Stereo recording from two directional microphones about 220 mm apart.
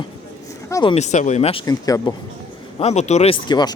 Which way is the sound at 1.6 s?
15° left (ahead or behind).